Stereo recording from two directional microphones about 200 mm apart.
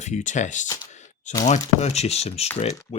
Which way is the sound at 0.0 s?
35° left (ahead or behind).